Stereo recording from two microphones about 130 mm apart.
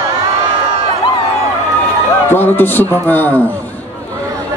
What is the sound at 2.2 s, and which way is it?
A man's voice, 15° left (ahead or behind).